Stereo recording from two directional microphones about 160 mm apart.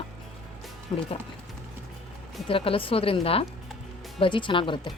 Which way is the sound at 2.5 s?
35° left (ahead or behind).